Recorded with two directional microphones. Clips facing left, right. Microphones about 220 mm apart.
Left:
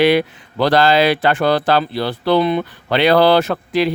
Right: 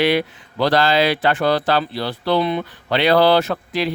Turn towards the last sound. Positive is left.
turn(degrees=55)  # may be behind; listen again after turning